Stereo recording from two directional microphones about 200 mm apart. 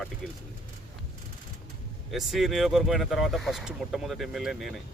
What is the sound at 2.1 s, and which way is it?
Speech, centre (ahead or behind).